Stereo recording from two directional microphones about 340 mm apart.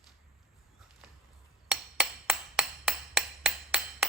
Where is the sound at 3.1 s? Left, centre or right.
Centre.